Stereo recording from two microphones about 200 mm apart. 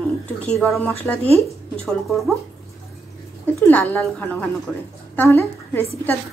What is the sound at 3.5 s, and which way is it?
A woman's voice, 10° left (ahead or behind).